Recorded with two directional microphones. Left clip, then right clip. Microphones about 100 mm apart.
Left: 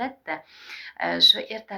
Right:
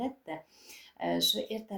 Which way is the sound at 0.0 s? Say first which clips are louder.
Left 7 dB; 30° right (ahead or behind).